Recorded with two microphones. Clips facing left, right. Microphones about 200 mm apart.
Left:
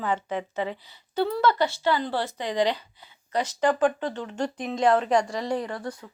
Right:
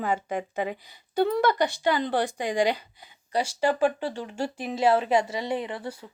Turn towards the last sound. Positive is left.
turn(degrees=-5)  # may be behind; listen again after turning